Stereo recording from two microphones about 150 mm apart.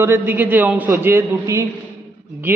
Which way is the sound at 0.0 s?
15° right (ahead or behind).